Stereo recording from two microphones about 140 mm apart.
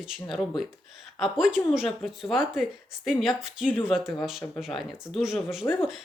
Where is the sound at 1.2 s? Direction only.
Centre (ahead or behind).